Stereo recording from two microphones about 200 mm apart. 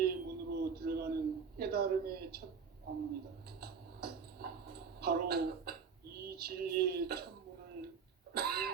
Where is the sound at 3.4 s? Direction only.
50° right (ahead or behind).